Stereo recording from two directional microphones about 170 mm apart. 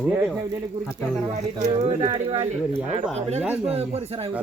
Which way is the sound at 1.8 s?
35° right (ahead or behind).